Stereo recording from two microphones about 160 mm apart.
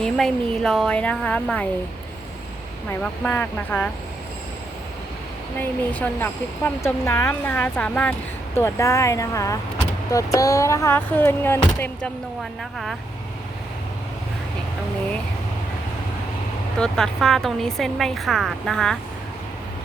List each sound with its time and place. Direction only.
0.0 s a woman's voice: 5° left (ahead or behind)
3.0 s speech: 10° left (ahead or behind)
5.5 s speech: 10° left (ahead or behind)
12.4 s a woman's voice: centre (ahead or behind)
16.7 s a woman's voice: 5° left (ahead or behind)